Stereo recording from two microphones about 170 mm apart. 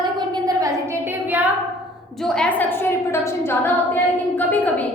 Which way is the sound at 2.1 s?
5° left (ahead or behind).